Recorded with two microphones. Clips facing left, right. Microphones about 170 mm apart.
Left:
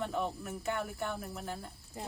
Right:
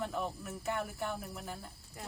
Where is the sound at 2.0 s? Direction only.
25° left (ahead or behind).